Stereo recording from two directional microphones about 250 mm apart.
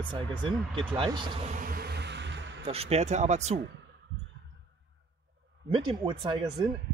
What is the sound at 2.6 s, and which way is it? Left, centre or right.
Speech, right.